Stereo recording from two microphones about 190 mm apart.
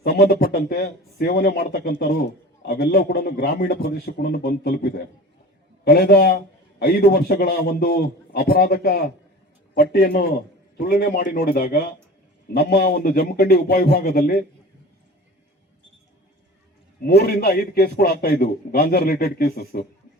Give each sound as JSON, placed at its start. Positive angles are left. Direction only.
{"t": 0.0, "sound": "a man's voice", "side_deg": 50}
{"t": 17.0, "sound": "a man's voice", "side_deg": 55}